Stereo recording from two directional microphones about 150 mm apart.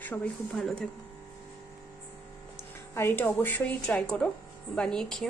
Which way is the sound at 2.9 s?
15° left (ahead or behind).